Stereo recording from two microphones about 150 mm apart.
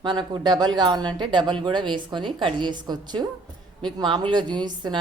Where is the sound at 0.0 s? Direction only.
30° right (ahead or behind).